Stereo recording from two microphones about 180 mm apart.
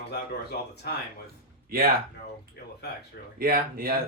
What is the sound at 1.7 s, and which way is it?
Speech, 55° right (ahead or behind).